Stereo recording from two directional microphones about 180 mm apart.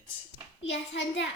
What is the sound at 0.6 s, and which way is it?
Hands, 85° left.